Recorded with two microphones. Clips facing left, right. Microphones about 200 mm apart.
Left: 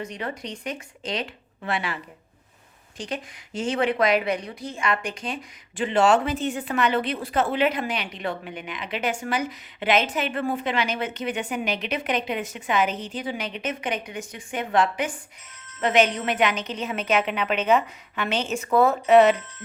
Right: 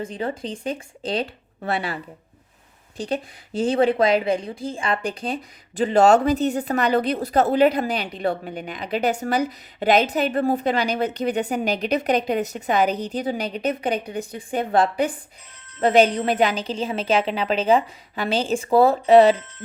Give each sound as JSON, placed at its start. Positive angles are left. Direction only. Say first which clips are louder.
{"t": 0.0, "sound": "a woman's voice", "louder": "right 5 dB", "side_deg": -30}
{"t": 3.0, "sound": "a woman's voice", "louder": "right 6 dB", "side_deg": -35}